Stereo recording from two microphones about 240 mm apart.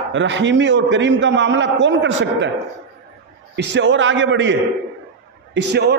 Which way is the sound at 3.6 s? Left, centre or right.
Right.